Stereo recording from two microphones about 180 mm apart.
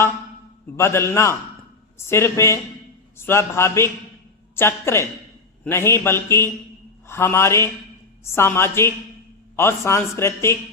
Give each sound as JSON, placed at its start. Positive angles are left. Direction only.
{"t": 0.8, "sound": "a man's voice", "side_deg": 15}